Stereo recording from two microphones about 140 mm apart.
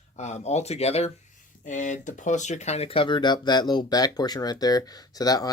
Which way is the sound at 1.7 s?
65° left (ahead or behind).